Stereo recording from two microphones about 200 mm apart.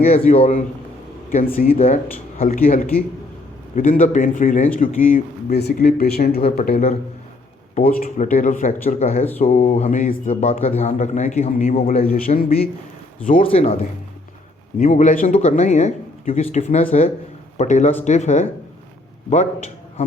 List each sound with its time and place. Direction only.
0.3 s speech: 30° left (ahead or behind)
1.3 s speech: 45° left (ahead or behind)
1.7 s speech: 35° left (ahead or behind)
12.1 s speech: 45° left (ahead or behind)
13.3 s speech: 30° left (ahead or behind)
14.8 s speech: 35° left (ahead or behind)